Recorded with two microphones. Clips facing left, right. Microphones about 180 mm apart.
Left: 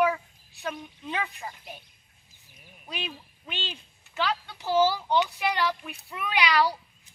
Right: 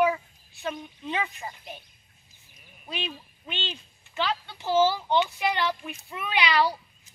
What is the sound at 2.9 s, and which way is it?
A child's voice, 5° left (ahead or behind).